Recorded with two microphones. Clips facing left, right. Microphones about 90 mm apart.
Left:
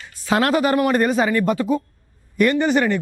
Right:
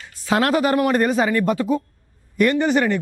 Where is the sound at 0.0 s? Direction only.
15° left (ahead or behind).